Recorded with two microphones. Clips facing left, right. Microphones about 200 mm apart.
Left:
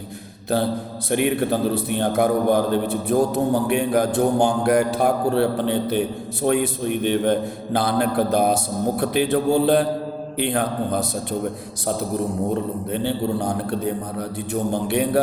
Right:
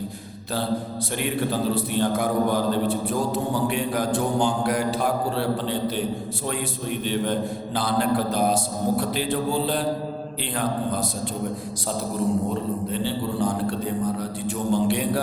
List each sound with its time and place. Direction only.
1.1 s mantra: 55° left (ahead or behind)
12.9 s mantra: 60° left (ahead or behind)